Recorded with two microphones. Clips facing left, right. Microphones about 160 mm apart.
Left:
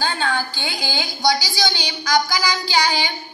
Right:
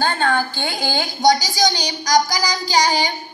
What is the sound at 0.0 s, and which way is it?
A woman's voice, 50° right (ahead or behind).